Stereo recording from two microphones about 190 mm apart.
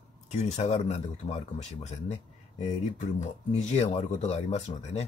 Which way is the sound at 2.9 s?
40° left (ahead or behind).